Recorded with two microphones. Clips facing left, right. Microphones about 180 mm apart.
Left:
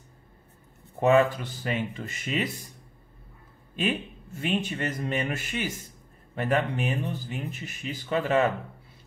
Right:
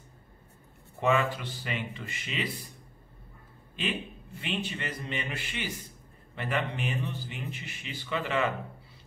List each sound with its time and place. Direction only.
1.0 s speech: 45° left (ahead or behind)
3.7 s speech: 45° left (ahead or behind)